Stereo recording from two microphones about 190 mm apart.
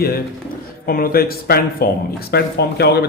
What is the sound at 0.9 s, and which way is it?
Speech, 50° left (ahead or behind).